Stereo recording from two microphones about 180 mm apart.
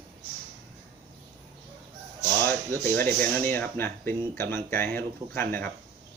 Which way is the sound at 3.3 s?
10° left (ahead or behind).